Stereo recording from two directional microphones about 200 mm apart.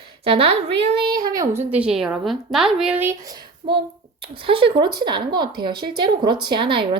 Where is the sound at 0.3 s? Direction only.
30° right (ahead or behind).